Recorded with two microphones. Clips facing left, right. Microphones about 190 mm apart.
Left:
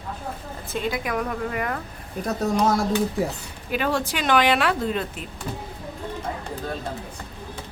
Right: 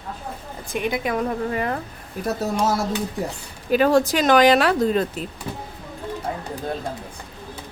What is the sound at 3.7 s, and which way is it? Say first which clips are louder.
A woman's voice: right 8 dB; 40° right (ahead or behind).